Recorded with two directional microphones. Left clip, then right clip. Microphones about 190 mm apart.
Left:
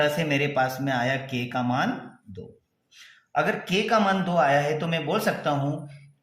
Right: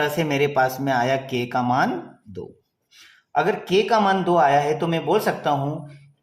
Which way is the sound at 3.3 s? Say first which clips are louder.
Right 4 dB; 25° right (ahead or behind).